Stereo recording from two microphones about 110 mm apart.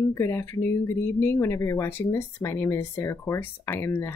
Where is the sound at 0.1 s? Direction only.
25° left (ahead or behind).